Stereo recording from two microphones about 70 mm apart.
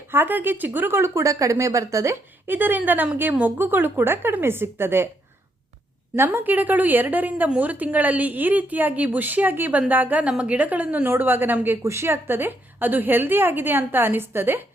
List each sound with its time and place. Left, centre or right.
0.1 s speech: right
2.5 s a woman's voice: right
6.1 s a woman's voice: right
11.8 s a woman's voice: right